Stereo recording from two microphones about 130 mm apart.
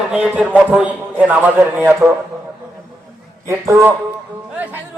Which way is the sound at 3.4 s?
20° right (ahead or behind).